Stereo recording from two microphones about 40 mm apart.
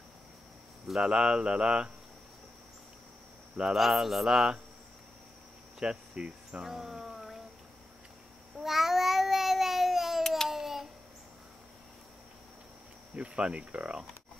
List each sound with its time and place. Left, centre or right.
1.0 s speech: centre
3.7 s speech: centre
5.8 s cricket: right
6.6 s a sound: centre
8.5 s cat: centre
10.2 s babbling: centre
10.5 s a sound: centre
13.1 s speech: right